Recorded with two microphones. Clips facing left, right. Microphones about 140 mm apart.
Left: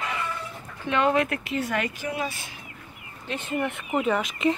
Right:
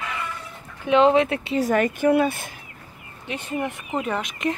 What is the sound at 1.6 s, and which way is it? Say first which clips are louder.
Speech: right 9 dB; 45° right (ahead or behind).